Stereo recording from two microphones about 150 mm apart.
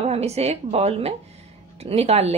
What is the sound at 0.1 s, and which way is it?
A woman's voice, 45° right (ahead or behind).